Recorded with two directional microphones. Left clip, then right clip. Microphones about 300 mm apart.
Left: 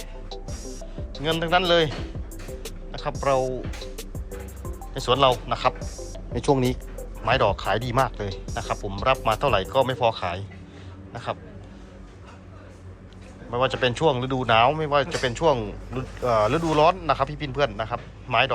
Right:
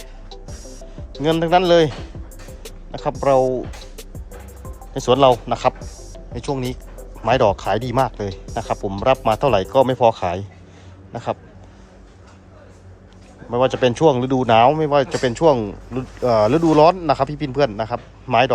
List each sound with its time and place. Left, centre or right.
0.3 s music: centre
1.2 s speech: right
3.0 s speech: right
4.9 s speech: right
6.1 s speech: centre
7.2 s speech: right
13.5 s speech: right